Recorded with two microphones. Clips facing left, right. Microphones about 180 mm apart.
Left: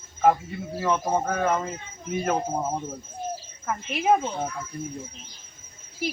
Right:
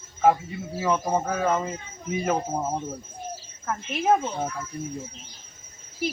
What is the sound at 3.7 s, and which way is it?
Speech, centre (ahead or behind).